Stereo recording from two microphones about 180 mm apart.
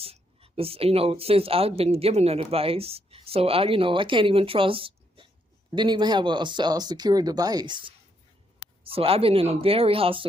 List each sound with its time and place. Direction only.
0.0 s speech: 30° right (ahead or behind)